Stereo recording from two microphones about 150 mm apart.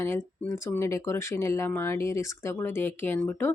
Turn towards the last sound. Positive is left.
turn(degrees=15)  # may be behind; listen again after turning